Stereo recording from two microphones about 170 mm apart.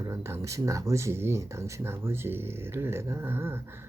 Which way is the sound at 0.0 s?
15° right (ahead or behind).